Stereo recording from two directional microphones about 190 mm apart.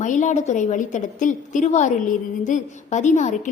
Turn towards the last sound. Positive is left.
turn(degrees=40)  # may be behind; listen again after turning